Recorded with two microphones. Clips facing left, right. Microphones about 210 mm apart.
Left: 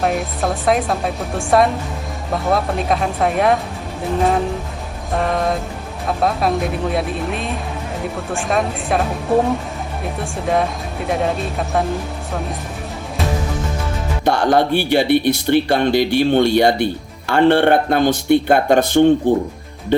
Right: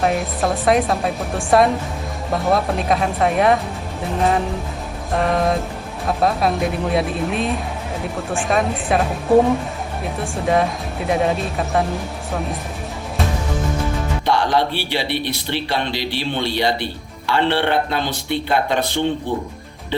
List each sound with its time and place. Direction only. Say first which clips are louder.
0.0 s speech: even; centre (ahead or behind)
14.3 s speech: left 4 dB; 50° left (ahead or behind)